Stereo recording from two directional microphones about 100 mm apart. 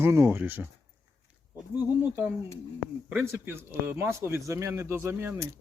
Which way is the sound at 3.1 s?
15° right (ahead or behind).